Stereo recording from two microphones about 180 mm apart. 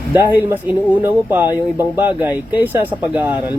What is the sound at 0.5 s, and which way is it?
Speech, 10° right (ahead or behind).